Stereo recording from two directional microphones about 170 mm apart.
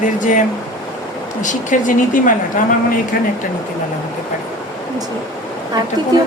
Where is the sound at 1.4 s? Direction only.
50° left (ahead or behind).